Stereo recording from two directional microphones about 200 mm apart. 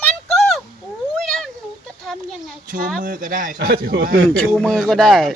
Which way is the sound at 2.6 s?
45° right (ahead or behind).